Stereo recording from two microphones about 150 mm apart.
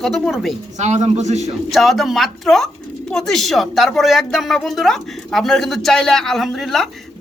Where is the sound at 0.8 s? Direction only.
50° right (ahead or behind).